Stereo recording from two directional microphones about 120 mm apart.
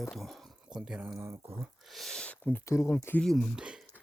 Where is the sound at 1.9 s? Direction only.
5° left (ahead or behind).